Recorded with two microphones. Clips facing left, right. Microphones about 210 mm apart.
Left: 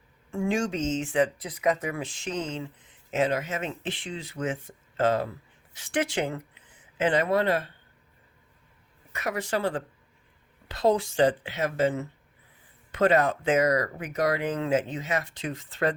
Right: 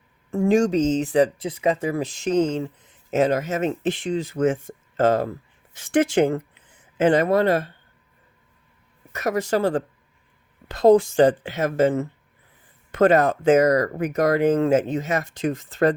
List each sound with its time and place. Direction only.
0.3 s speech: 40° right (ahead or behind)
9.1 s speech: 40° right (ahead or behind)